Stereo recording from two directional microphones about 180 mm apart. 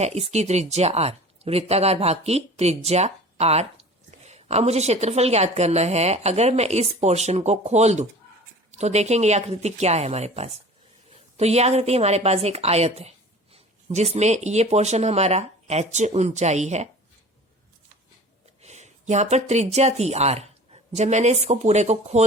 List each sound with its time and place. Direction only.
0.0 s a woman's voice: 35° right (ahead or behind)
18.6 s speech: 40° right (ahead or behind)